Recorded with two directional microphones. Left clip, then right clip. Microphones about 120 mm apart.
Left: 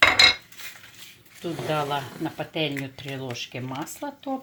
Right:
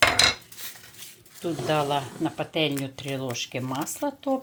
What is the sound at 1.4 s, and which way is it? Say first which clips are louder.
Speech: right 2 dB; 15° right (ahead or behind).